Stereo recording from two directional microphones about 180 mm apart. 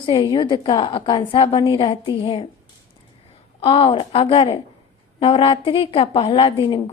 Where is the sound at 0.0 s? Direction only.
25° left (ahead or behind).